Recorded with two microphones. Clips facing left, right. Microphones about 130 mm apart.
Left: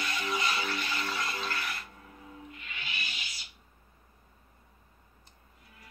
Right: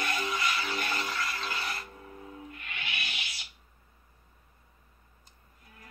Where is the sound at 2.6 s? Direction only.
60° right (ahead or behind).